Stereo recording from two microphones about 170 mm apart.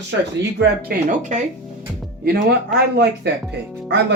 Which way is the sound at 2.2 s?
60° right (ahead or behind).